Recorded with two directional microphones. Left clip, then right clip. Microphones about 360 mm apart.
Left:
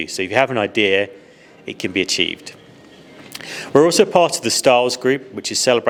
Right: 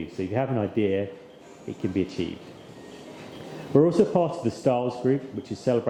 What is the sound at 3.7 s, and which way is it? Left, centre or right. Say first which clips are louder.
Speech: left 8 dB; centre.